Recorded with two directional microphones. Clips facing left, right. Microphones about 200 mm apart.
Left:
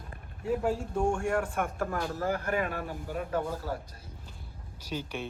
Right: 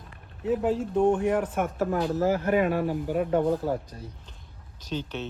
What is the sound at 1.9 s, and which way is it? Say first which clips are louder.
Speech: right 7 dB; 20° right (ahead or behind).